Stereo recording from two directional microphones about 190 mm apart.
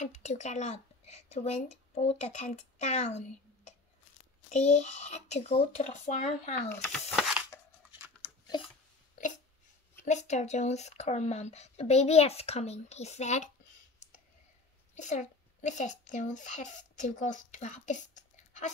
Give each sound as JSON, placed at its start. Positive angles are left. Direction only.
{"t": 0.0, "sound": "a woman's voice", "side_deg": 40}
{"t": 6.7, "sound": "speech", "side_deg": 5}
{"t": 10.0, "sound": "speech", "side_deg": 40}
{"t": 15.0, "sound": "a child's voice", "side_deg": 40}